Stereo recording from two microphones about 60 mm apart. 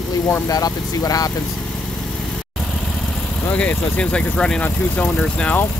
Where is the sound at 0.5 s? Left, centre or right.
Left.